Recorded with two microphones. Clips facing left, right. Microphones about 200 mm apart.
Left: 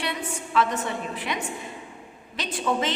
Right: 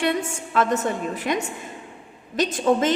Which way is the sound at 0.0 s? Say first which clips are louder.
Right 7 dB; 50° right (ahead or behind).